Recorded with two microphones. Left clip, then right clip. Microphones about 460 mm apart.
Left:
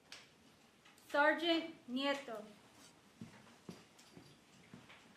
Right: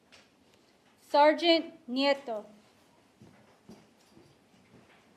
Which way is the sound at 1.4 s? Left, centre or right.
Right.